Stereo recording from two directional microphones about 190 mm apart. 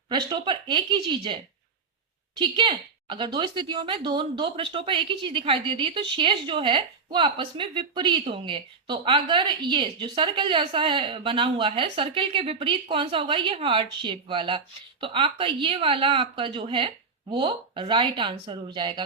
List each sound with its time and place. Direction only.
0.1 s a woman's voice: 25° right (ahead or behind)
2.4 s a woman's voice: 25° right (ahead or behind)